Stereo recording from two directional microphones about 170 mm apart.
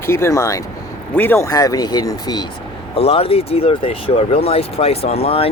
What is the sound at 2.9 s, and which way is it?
Speech, 35° left (ahead or behind).